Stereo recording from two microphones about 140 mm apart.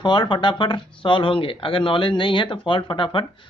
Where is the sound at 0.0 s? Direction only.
35° left (ahead or behind).